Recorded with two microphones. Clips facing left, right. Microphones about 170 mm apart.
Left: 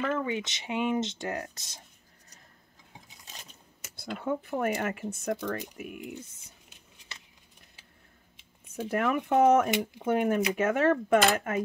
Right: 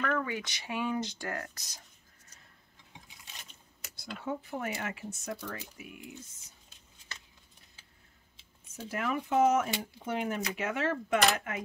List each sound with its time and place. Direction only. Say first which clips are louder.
0.0 s speech: left 3 dB; 20° left (ahead or behind)
3.9 s speech: left 5 dB; 55° left (ahead or behind)
8.8 s speech: left 6 dB; 60° left (ahead or behind)